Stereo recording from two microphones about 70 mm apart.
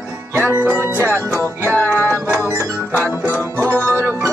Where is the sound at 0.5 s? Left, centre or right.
Right.